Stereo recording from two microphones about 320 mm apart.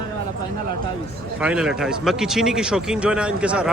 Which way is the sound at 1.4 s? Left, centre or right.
Centre.